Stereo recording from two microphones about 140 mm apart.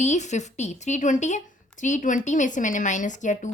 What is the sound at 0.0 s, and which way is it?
Speech, 55° left (ahead or behind).